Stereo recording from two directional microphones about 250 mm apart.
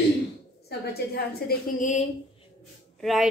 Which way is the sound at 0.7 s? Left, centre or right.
Left.